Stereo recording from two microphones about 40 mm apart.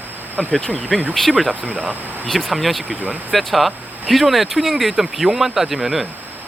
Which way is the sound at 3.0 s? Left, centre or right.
Right.